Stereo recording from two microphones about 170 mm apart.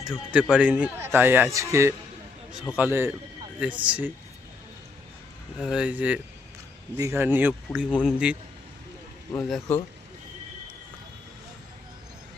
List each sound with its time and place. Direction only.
0.1 s a man's voice: 5° right (ahead or behind)
5.5 s a man's voice: 5° right (ahead or behind)
9.5 s speech: 10° left (ahead or behind)